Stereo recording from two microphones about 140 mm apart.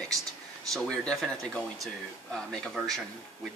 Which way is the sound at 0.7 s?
Centre (ahead or behind).